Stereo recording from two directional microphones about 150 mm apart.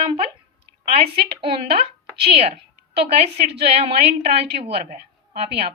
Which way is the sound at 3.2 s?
45° right (ahead or behind).